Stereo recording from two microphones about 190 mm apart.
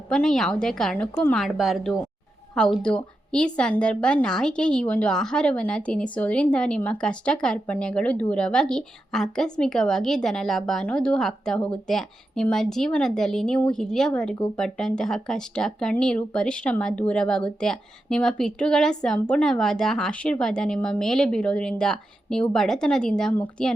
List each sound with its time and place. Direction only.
0.1 s speech: 5° left (ahead or behind)